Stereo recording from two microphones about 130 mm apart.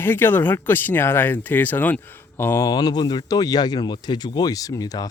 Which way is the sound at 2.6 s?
30° left (ahead or behind).